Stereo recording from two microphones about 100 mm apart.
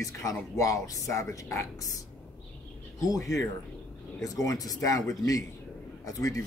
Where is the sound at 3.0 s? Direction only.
35° left (ahead or behind).